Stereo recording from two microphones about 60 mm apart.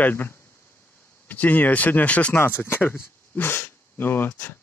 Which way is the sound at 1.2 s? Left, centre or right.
Left.